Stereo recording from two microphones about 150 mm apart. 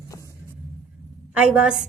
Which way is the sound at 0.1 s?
20° left (ahead or behind).